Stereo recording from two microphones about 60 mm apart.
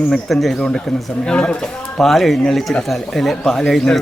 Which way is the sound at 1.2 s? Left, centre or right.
Centre.